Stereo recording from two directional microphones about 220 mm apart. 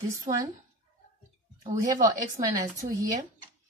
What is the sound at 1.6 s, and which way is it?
Speech, 15° right (ahead or behind).